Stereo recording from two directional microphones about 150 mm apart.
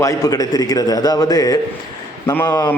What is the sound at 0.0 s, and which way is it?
A man's voice, 25° left (ahead or behind).